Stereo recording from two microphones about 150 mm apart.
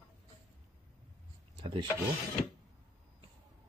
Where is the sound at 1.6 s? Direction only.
35° right (ahead or behind).